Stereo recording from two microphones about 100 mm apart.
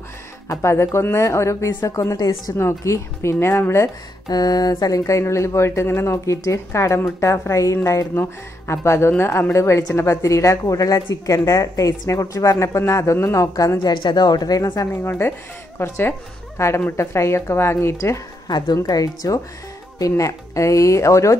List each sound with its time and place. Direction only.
0.5 s a woman's voice: 25° left (ahead or behind)
2.5 s speech: 30° left (ahead or behind)
4.3 s a woman's voice: 40° left (ahead or behind)
14.0 s speech: 45° left (ahead or behind)
15.0 s a woman's voice: 25° left (ahead or behind)